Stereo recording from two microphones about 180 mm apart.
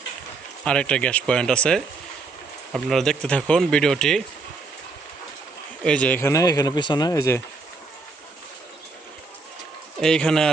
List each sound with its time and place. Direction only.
0.6 s speech: 5° left (ahead or behind)
5.8 s speech: 5° left (ahead or behind)
10.0 s speech: 5° left (ahead or behind)